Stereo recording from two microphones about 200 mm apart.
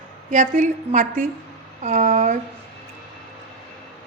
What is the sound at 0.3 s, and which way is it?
A woman's voice, 40° right (ahead or behind).